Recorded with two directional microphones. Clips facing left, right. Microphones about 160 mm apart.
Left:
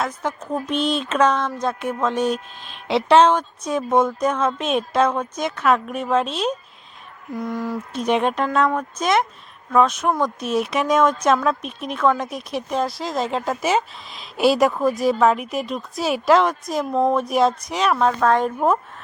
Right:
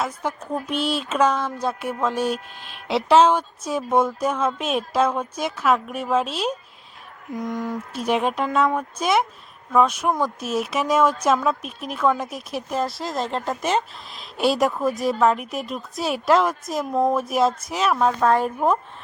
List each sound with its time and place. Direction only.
0.0 s speech: 10° right (ahead or behind)
7.9 s speech: 5° right (ahead or behind)